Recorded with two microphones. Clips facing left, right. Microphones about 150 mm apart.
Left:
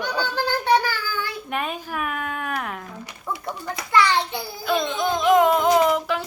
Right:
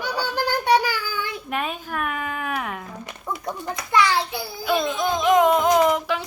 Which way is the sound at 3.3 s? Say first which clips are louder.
Even; 15° right (ahead or behind).